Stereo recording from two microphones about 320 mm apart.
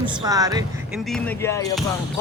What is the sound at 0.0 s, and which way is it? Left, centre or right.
Speech, centre.